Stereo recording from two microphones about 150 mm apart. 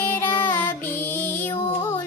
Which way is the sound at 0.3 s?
10° left (ahead or behind).